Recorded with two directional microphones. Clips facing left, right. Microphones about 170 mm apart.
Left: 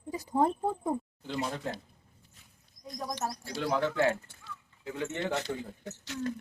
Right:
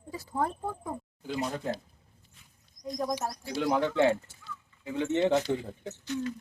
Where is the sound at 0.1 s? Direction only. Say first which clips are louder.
Left 4 dB; 20° left (ahead or behind).